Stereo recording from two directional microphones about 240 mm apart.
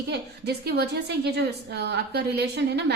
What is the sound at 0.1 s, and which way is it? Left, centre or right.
A woman's voice, right.